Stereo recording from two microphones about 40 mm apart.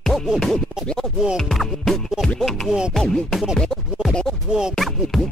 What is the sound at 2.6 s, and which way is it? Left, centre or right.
Music, right.